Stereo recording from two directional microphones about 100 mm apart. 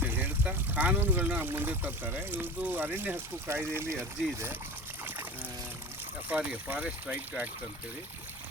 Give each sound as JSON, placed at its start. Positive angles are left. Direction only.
{"t": 0.0, "sound": "speech", "side_deg": -15}
{"t": 6.2, "sound": "speech", "side_deg": -15}